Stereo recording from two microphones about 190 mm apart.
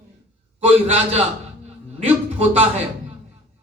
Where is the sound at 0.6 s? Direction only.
35° right (ahead or behind).